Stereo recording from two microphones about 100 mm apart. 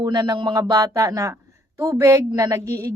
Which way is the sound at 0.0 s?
40° right (ahead or behind).